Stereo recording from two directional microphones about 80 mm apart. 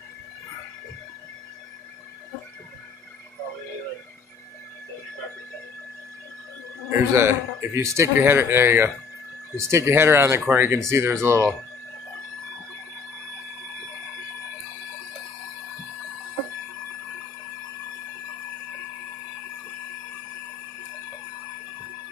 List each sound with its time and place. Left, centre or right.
6.9 s a man's voice: right
8.2 s a man's voice: right